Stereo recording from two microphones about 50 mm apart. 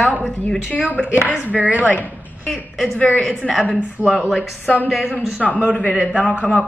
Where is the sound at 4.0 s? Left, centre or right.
Right.